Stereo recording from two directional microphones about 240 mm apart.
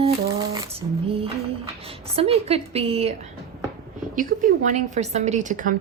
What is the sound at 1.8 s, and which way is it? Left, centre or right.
A woman's voice, right.